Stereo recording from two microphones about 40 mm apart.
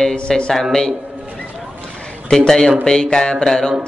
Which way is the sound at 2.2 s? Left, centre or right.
Centre.